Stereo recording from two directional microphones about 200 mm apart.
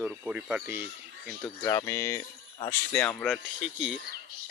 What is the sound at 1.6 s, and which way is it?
Speech, 15° left (ahead or behind).